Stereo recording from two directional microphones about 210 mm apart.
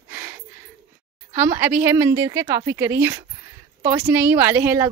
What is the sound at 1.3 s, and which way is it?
Speech, 10° right (ahead or behind).